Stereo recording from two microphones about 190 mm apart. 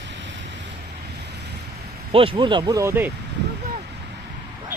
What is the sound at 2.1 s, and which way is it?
Speech, 30° right (ahead or behind).